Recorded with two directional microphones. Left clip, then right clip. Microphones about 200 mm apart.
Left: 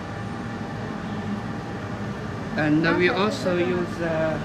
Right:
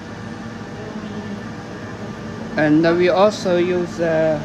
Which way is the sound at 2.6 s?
30° right (ahead or behind).